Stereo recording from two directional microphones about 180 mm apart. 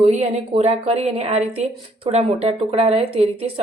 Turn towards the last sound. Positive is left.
turn(degrees=-35)  # may be behind; listen again after turning